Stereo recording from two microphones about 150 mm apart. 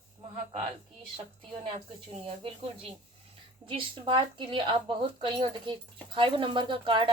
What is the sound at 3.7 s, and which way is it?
Speech, 35° right (ahead or behind).